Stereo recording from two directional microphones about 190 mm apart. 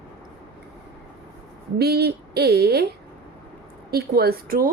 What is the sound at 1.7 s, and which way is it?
Speech, 60° right (ahead or behind).